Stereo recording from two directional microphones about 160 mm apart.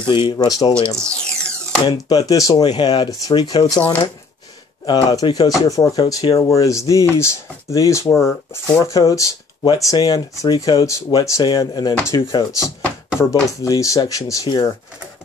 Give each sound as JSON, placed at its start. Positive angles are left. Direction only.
{"t": 0.0, "sound": "speech", "side_deg": 30}
{"t": 0.9, "sound": "music", "side_deg": 5}
{"t": 1.9, "sound": "speech", "side_deg": 25}
{"t": 4.8, "sound": "speech", "side_deg": 25}
{"t": 11.9, "sound": "speech", "side_deg": 15}
{"t": 12.2, "sound": "speech", "side_deg": 25}